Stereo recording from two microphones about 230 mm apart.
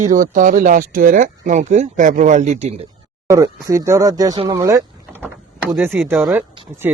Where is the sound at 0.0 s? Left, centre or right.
Right.